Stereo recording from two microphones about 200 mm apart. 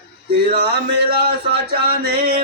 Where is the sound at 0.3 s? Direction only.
50° right (ahead or behind).